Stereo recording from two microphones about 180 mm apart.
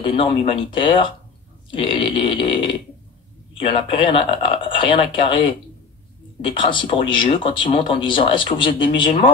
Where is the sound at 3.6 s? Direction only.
30° left (ahead or behind).